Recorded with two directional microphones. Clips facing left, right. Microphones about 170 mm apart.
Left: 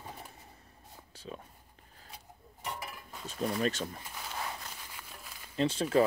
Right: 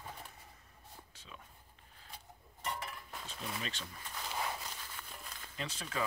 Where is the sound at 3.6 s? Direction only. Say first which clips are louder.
Left 13 dB; 45° left (ahead or behind).